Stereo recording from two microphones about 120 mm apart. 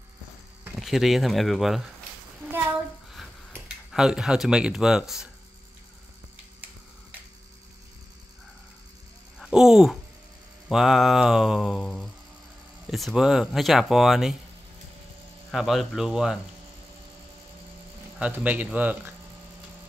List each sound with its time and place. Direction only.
0.7 s speech: centre (ahead or behind)
2.4 s a sound: 20° right (ahead or behind)
3.9 s speech: 5° right (ahead or behind)
9.4 s speech: 5° right (ahead or behind)
15.5 s speech: 5° right (ahead or behind)
18.2 s speech: 15° right (ahead or behind)